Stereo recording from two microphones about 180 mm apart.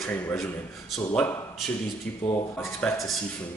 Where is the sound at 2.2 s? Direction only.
35° left (ahead or behind).